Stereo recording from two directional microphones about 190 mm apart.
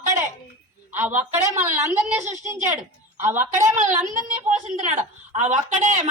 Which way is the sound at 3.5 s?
40° right (ahead or behind).